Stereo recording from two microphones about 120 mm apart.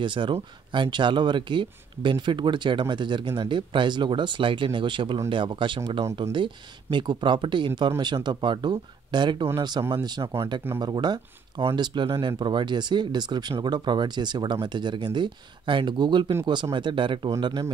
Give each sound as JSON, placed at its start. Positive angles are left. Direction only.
{"t": 0.0, "sound": "speech", "side_deg": -45}